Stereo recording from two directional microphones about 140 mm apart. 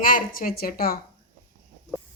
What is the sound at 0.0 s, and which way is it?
Speech, 85° left.